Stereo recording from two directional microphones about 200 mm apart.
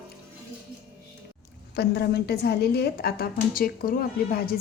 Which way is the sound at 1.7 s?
55° left (ahead or behind).